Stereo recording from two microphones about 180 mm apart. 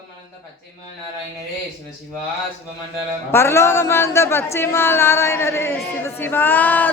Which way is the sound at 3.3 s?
15° left (ahead or behind).